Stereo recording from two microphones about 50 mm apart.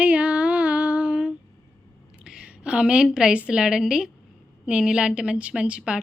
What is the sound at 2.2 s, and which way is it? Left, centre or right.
A woman's voice, centre.